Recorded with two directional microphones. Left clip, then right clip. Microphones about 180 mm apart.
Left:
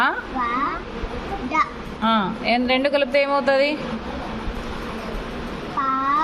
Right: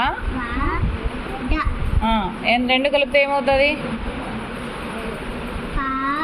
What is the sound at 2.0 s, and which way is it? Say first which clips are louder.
A woman's voice: even; 20° left (ahead or behind).